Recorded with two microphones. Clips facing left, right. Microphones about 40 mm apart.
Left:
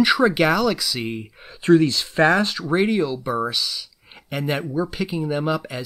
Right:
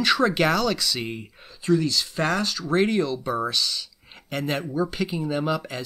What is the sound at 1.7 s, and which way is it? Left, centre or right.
Speech, left.